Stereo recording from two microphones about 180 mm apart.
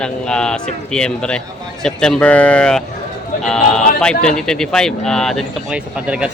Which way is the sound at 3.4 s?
5° left (ahead or behind).